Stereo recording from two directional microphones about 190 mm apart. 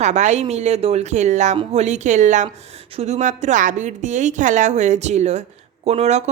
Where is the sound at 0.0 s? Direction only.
40° right (ahead or behind).